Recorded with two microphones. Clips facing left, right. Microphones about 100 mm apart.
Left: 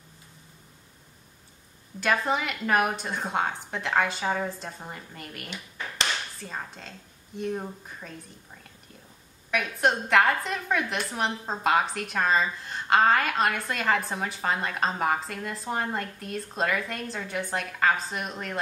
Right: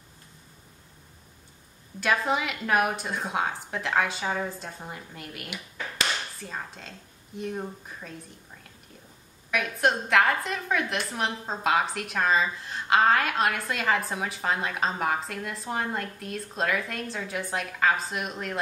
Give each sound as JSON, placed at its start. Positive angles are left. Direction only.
{"t": 2.0, "sound": "a woman's voice", "side_deg": 0}
{"t": 9.5, "sound": "a woman's voice", "side_deg": 0}